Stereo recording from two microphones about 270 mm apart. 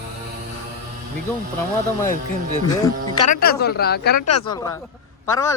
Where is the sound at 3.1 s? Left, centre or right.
Left.